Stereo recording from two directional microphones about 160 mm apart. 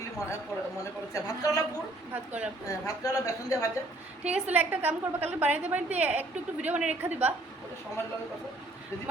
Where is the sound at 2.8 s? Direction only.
20° left (ahead or behind).